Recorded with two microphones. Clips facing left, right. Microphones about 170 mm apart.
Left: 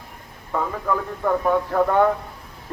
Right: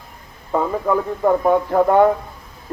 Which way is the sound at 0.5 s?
25° right (ahead or behind).